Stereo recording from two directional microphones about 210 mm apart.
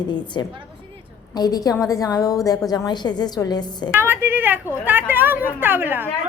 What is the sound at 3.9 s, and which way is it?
A woman's voice, 10° right (ahead or behind).